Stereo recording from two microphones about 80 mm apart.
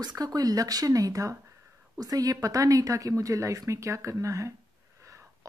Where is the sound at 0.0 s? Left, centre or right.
Right.